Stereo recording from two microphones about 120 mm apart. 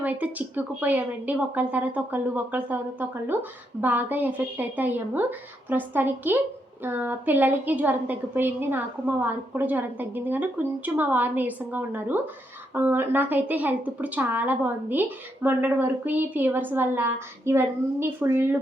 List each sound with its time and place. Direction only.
0.0 s speech: 15° right (ahead or behind)